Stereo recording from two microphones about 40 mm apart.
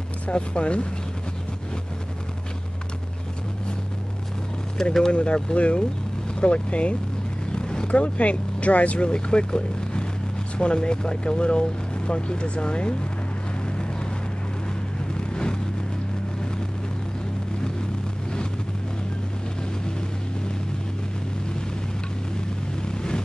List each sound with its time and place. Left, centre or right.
0.3 s speech: left
4.8 s speech: centre
5.1 s speech: left
7.5 s a sound: left
7.9 s speech: left
15.1 s a sound: left
22.8 s vehicle: left